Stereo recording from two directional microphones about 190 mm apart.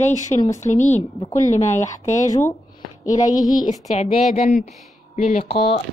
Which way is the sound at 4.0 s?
35° left (ahead or behind).